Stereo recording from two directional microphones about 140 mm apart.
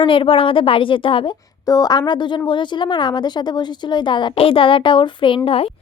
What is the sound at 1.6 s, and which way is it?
Speech, 25° left (ahead or behind).